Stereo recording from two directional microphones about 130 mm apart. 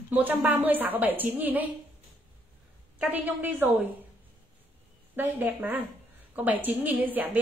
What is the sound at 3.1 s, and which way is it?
Speech, 15° right (ahead or behind).